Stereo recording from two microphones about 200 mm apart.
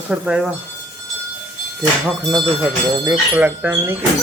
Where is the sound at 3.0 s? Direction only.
10° right (ahead or behind).